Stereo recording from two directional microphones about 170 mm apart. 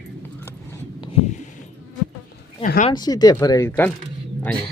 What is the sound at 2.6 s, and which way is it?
Speech, 50° left (ahead or behind).